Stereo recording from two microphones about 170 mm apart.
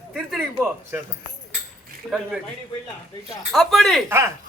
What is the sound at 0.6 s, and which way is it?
Speech, 15° right (ahead or behind).